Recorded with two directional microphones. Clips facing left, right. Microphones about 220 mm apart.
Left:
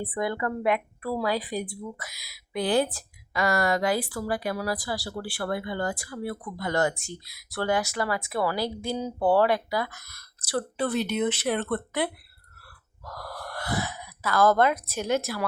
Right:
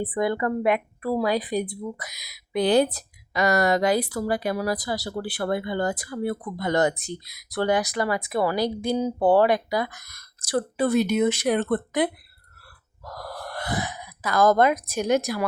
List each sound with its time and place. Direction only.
0.0 s a woman's voice: 20° right (ahead or behind)
13.1 s speech: 20° right (ahead or behind)